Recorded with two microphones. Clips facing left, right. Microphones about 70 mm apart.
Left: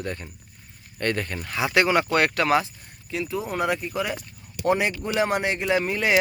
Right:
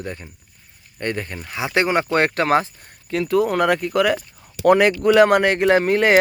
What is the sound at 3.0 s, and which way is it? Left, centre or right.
Speech, right.